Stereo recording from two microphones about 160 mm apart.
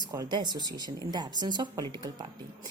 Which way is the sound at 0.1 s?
25° right (ahead or behind).